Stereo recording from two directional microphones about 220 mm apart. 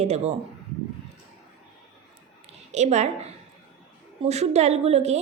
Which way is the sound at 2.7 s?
30° right (ahead or behind).